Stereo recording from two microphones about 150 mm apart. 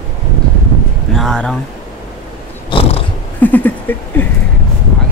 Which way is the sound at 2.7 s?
35° left (ahead or behind).